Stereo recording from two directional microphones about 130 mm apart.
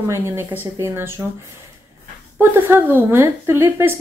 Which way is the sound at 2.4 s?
15° right (ahead or behind).